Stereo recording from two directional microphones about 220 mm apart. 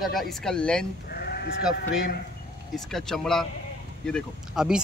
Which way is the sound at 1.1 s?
45° left (ahead or behind).